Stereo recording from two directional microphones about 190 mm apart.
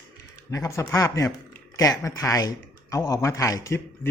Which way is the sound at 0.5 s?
15° left (ahead or behind).